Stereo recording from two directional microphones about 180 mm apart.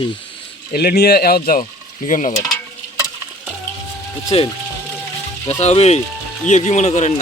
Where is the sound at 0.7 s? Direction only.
60° left (ahead or behind).